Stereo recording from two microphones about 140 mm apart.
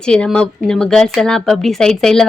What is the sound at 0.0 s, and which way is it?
Speech, 5° left (ahead or behind).